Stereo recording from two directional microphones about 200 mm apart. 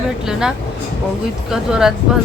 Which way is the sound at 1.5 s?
5° right (ahead or behind).